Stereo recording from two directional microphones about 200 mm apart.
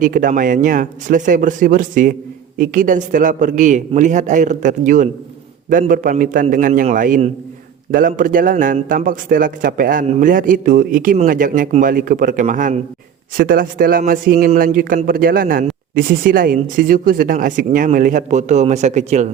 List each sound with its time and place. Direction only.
0.0 s a man's voice: 45° right (ahead or behind)